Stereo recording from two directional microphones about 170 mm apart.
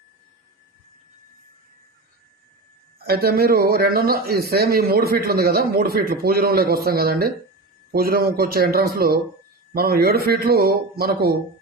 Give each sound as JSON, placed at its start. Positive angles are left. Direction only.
{"t": 3.0, "sound": "speech", "side_deg": -65}